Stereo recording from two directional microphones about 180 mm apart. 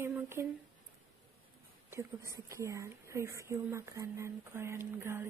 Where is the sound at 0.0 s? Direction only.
15° right (ahead or behind).